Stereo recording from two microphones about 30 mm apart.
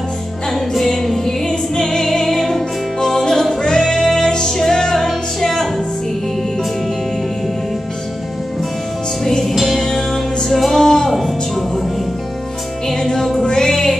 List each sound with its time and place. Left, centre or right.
1.0 s music: centre
1.8 s music: centre
9.6 s music: centre
11.1 s music: centre
12.8 s music: centre